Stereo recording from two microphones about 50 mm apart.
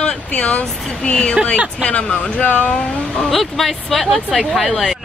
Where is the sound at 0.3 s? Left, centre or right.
Left.